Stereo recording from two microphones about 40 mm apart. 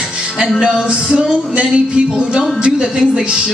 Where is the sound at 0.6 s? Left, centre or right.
Right.